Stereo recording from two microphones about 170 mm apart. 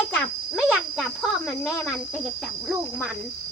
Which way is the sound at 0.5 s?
5° right (ahead or behind).